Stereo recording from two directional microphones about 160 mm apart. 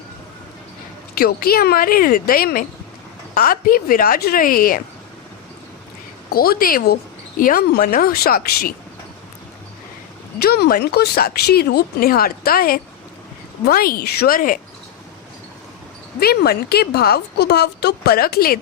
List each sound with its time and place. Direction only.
1.2 s speech: 70° left (ahead or behind)
6.3 s speech: 70° left (ahead or behind)
10.3 s speech: 80° left; by 14.6 s 60° left (ahead or behind)
16.2 s a woman's voice: 80° left